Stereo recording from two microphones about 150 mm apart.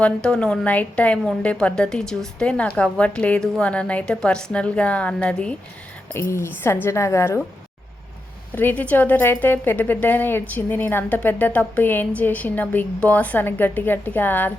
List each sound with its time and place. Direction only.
0.0 s a woman's voice: 5° left (ahead or behind)
8.5 s a woman's voice: 10° left (ahead or behind)